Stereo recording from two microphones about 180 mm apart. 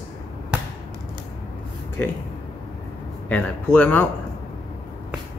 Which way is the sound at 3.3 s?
10° left (ahead or behind).